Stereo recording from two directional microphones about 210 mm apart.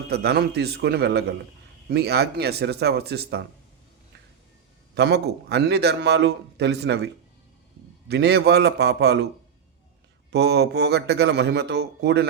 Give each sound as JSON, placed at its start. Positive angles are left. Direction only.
{"t": 0.1, "sound": "a man's voice", "side_deg": -50}
{"t": 4.9, "sound": "a man's voice", "side_deg": -55}
{"t": 10.3, "sound": "a man's voice", "side_deg": -50}